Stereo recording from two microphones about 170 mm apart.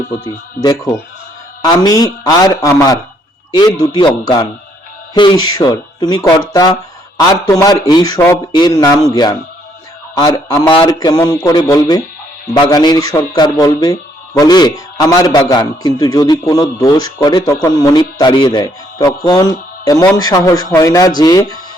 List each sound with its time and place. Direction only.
0.3 s speech: 20° left (ahead or behind)